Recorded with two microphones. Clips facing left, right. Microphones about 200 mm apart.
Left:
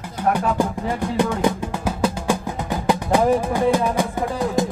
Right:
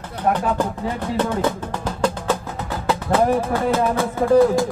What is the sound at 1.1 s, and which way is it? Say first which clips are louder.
Music: left 1 dB; 15° left (ahead or behind).